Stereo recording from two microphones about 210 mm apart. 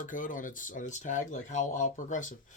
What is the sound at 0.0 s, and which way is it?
Speech, 40° left (ahead or behind).